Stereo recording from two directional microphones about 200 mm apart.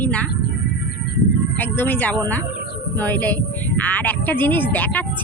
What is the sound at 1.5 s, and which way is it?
Speech, 10° left (ahead or behind).